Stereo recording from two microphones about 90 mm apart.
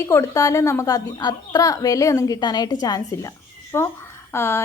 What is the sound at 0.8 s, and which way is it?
A woman's voice, 50° left (ahead or behind).